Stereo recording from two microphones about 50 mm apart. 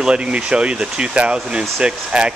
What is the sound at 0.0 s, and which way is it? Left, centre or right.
Speech, right.